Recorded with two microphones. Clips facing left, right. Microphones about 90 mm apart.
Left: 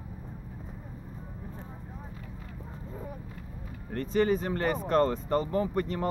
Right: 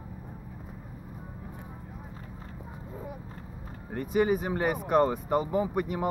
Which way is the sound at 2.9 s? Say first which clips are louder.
Right 1 dB; 10° right (ahead or behind).